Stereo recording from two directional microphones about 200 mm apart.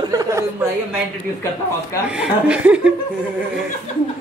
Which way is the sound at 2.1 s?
5° right (ahead or behind).